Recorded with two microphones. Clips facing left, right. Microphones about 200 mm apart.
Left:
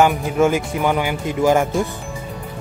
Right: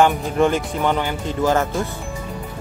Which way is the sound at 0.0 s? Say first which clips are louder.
Left 1 dB; 10° left (ahead or behind).